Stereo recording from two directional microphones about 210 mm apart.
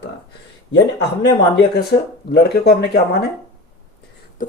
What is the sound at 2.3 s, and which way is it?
Speech, 50° left (ahead or behind).